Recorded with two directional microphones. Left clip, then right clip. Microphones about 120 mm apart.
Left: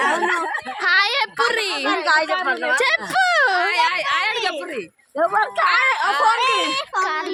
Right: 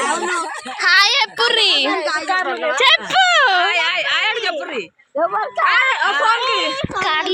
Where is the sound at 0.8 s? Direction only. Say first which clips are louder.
Right 5 dB; 15° left (ahead or behind).